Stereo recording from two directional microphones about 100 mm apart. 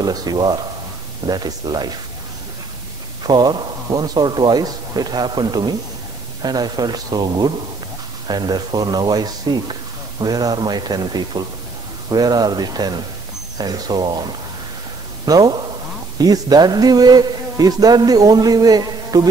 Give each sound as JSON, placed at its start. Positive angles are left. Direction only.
{"t": 0.0, "sound": "speech", "side_deg": -40}
{"t": 3.3, "sound": "a man's voice", "side_deg": -45}